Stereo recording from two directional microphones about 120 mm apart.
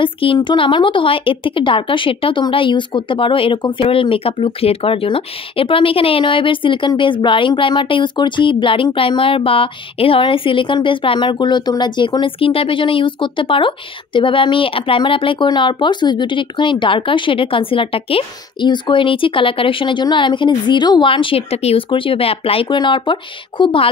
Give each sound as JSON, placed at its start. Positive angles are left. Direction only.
{"t": 0.0, "sound": "a woman's voice", "side_deg": 45}